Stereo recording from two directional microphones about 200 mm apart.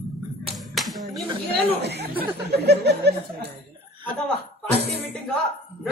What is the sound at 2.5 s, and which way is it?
Speech, 55° right (ahead or behind).